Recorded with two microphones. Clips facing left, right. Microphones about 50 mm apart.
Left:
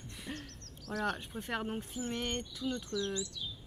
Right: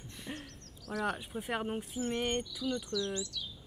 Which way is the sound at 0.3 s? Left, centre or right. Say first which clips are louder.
Even; centre.